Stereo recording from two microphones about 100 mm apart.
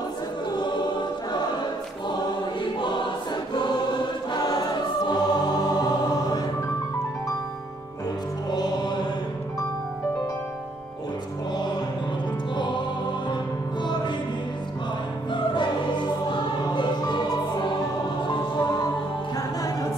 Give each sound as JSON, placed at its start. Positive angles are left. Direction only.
{"t": 0.5, "sound": "choir", "side_deg": 45}
{"t": 2.8, "sound": "choir", "side_deg": 50}
{"t": 8.5, "sound": "music", "side_deg": 45}
{"t": 12.5, "sound": "music", "side_deg": 50}
{"t": 15.3, "sound": "choir", "side_deg": 50}
{"t": 18.2, "sound": "music", "side_deg": 50}